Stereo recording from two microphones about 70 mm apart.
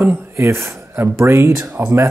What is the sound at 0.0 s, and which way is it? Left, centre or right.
Speech, right.